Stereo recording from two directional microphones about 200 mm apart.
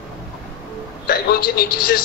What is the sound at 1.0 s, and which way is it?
Speech, 50° left (ahead or behind).